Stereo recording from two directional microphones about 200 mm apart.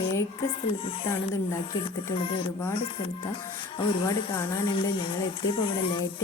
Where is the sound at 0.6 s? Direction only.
25° left (ahead or behind).